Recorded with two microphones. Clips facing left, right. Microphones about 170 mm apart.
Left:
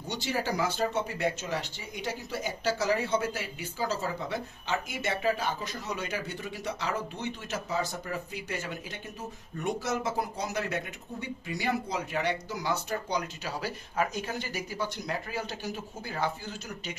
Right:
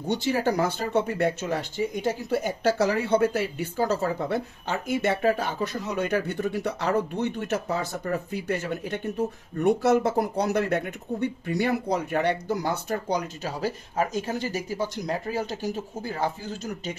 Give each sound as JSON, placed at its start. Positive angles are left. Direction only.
{"t": 0.1, "sound": "speech", "side_deg": -55}
{"t": 13.4, "sound": "speech", "side_deg": -40}